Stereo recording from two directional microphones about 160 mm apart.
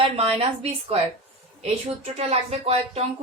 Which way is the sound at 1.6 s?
40° right (ahead or behind).